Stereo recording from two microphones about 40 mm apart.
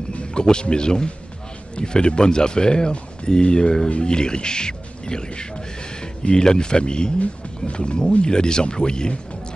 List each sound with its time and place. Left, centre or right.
0.1 s speech: left